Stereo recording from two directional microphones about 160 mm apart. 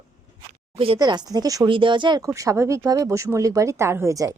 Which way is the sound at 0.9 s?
25° right (ahead or behind).